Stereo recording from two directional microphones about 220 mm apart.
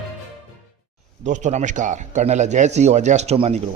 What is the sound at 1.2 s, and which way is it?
A man's voice, 35° right (ahead or behind).